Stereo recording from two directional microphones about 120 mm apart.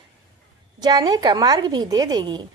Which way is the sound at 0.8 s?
35° right (ahead or behind).